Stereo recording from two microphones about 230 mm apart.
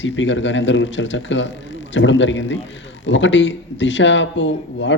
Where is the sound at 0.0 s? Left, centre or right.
Left.